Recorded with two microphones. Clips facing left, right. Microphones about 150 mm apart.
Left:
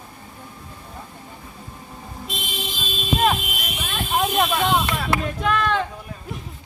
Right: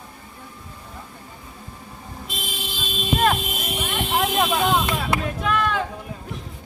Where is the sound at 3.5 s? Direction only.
25° right (ahead or behind).